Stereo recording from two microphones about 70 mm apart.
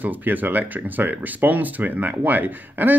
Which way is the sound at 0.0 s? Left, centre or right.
Right.